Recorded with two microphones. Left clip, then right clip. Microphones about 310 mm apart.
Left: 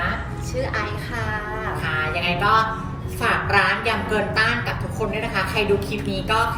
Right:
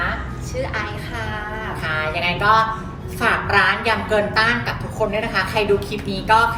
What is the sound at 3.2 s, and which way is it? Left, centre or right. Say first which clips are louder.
A woman's voice: right 2 dB; centre.